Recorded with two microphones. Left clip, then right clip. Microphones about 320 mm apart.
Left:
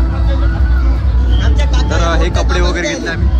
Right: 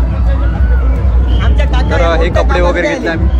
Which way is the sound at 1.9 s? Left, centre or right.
Centre.